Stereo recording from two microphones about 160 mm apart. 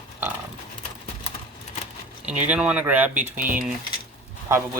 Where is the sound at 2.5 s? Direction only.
5° right (ahead or behind).